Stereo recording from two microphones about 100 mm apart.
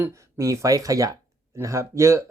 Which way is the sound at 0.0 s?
30° right (ahead or behind).